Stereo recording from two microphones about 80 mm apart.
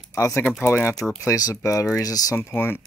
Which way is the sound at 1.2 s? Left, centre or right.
Left.